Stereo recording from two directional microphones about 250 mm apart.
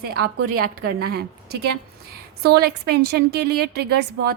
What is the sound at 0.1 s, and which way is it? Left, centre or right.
A woman's voice, right.